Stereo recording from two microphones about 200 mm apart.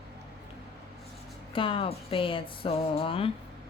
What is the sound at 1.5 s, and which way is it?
Speech, 25° left (ahead or behind).